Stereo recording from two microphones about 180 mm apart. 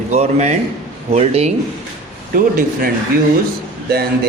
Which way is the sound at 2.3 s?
55° right (ahead or behind).